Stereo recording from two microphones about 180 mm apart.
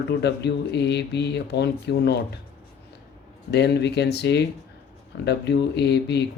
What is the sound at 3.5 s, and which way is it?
Speech, 70° left (ahead or behind).